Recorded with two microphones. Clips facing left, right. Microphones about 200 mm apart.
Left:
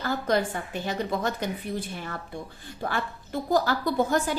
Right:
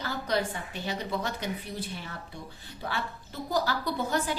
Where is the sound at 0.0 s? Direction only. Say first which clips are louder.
Left 4 dB; 50° left (ahead or behind).